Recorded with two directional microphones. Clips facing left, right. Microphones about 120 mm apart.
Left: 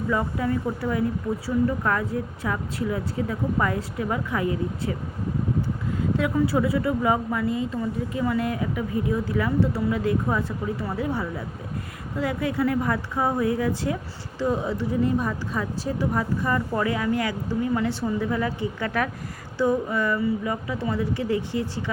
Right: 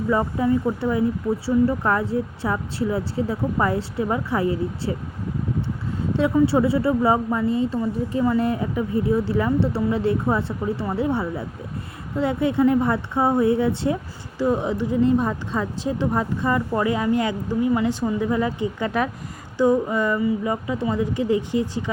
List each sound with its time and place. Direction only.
0.1 s a woman's voice: 25° right (ahead or behind)
6.1 s a woman's voice: 30° right (ahead or behind)
14.3 s a woman's voice: 15° right (ahead or behind)